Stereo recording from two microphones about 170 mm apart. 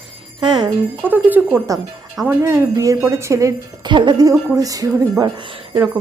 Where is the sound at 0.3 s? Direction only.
25° right (ahead or behind).